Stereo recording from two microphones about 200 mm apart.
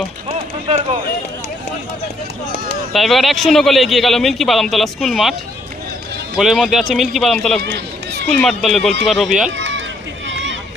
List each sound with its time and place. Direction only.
2.9 s speech: centre (ahead or behind)
6.3 s speech: centre (ahead or behind)
9.5 s run: 65° right (ahead or behind)